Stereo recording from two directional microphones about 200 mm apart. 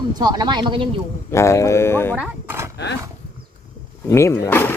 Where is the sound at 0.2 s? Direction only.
20° right (ahead or behind).